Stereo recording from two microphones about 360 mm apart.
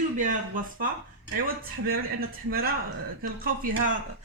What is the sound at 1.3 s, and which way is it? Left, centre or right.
A woman's voice, right.